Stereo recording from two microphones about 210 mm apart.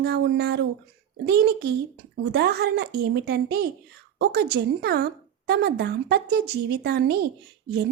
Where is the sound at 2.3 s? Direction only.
50° right (ahead or behind).